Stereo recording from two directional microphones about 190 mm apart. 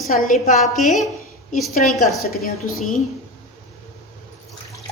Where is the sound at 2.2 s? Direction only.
50° left (ahead or behind).